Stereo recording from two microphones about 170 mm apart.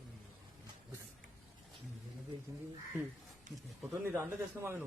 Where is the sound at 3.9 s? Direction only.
15° right (ahead or behind).